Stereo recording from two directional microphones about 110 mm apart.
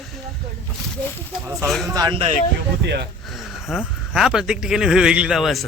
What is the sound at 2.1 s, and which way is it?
Speech, 65° right (ahead or behind).